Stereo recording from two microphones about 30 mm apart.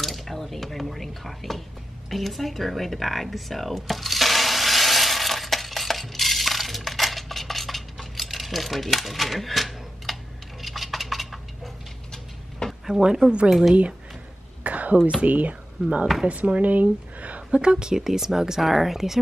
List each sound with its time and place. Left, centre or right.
0.0 s speech: centre
2.0 s a sound: centre
10.6 s coin: centre
12.6 s a sound: left
13.5 s speech: centre
14.6 s a sound: right
15.0 s speech: centre
15.2 s speech: right
16.6 s a sound: right
17.5 s speech: right
17.9 s speech: centre
18.6 s speech: centre